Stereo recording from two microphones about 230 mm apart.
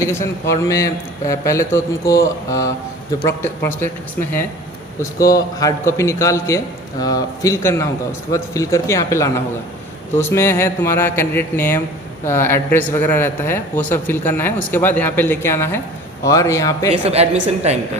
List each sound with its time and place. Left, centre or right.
0.0 s a man's voice: centre
16.9 s a woman's voice: right